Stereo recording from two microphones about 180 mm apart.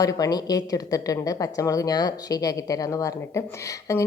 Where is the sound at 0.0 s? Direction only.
20° left (ahead or behind).